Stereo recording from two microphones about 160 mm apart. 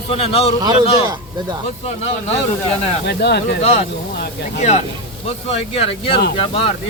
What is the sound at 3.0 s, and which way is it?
Speech, 90° left.